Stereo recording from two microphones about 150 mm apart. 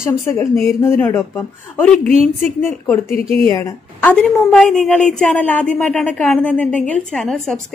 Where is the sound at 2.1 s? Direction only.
45° right (ahead or behind).